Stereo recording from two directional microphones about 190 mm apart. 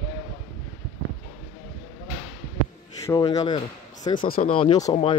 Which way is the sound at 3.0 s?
15° left (ahead or behind).